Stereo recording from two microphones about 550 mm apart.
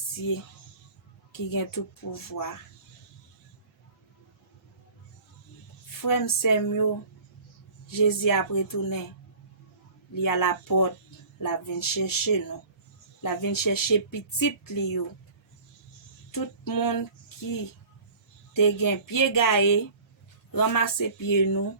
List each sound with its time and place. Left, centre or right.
1.3 s speech: left
6.0 s speech: left
7.9 s speech: left
10.2 s speech: left
16.3 s a sound: left
18.5 s speech: left